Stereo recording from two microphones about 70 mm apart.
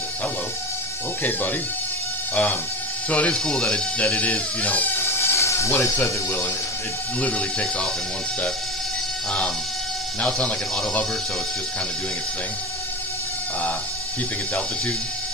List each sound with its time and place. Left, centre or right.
2.3 s speech: left
5.2 s a sound: left
5.7 s speech: left
7.2 s speech: centre
10.2 s speech: centre